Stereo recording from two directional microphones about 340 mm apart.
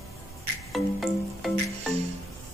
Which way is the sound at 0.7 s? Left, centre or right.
Centre.